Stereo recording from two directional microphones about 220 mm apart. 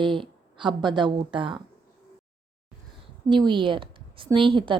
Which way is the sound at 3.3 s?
20° right (ahead or behind).